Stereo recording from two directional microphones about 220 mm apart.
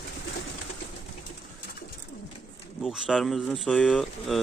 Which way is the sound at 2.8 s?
Centre (ahead or behind).